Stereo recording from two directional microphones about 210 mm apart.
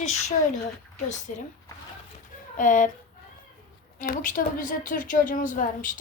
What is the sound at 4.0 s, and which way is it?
Speech, 40° left (ahead or behind).